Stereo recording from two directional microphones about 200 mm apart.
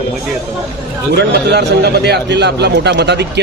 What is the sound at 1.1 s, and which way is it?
A man's voice, 55° right (ahead or behind).